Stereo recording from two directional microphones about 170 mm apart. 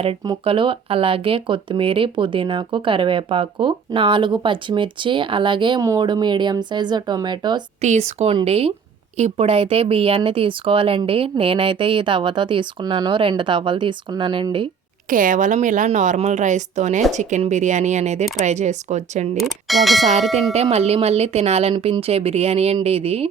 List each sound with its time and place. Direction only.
0.3 s speech: 30° right (ahead or behind)
7.8 s speech: 40° right (ahead or behind)
15.1 s speech: 50° right (ahead or behind)
19.4 s speech: centre (ahead or behind)
20.5 s speech: 40° right (ahead or behind)